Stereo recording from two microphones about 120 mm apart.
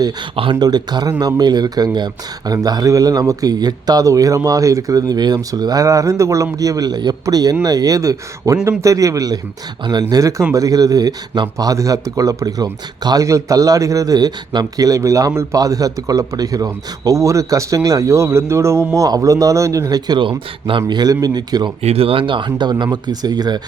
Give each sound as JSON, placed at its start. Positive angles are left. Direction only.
{"t": 0.6, "sound": "speech", "side_deg": -35}
{"t": 21.8, "sound": "speech", "side_deg": -60}